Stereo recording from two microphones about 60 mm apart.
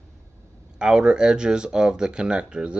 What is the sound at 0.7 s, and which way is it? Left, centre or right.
Speech, centre.